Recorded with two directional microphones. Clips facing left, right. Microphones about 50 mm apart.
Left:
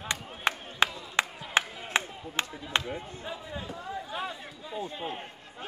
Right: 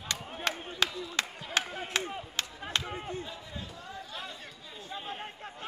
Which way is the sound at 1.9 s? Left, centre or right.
Left.